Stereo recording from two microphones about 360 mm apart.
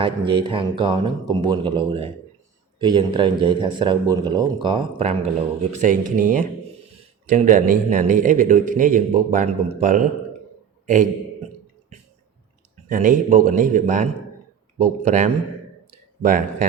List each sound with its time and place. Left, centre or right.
0.0 s a man's voice: centre
12.9 s a man's voice: right